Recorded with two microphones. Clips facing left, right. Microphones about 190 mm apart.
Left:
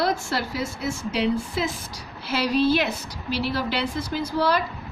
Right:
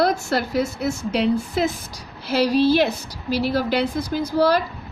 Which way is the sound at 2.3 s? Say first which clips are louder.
Right 4 dB; 35° right (ahead or behind).